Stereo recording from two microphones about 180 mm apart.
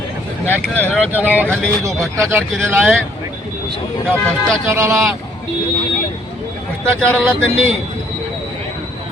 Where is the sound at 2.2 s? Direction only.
15° right (ahead or behind).